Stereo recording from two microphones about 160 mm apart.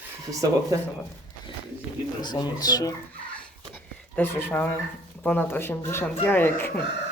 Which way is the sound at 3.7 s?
15° left (ahead or behind).